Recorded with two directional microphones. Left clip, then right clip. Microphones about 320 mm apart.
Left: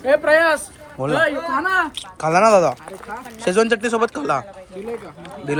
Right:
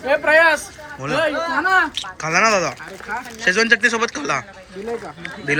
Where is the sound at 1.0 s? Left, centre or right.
Centre.